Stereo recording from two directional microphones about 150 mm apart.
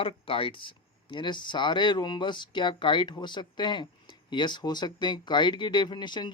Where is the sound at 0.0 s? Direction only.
35° left (ahead or behind).